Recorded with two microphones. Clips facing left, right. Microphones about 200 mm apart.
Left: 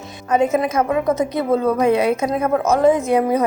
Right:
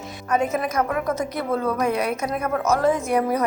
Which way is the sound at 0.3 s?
25° left (ahead or behind).